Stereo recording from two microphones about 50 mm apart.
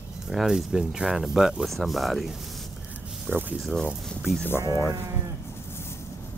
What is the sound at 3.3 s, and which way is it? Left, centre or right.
Speech, right.